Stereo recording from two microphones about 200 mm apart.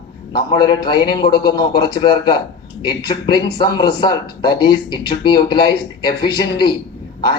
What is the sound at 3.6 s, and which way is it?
A man's voice, 20° left (ahead or behind).